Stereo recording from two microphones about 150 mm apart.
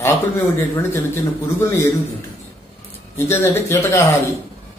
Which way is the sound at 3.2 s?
15° left (ahead or behind).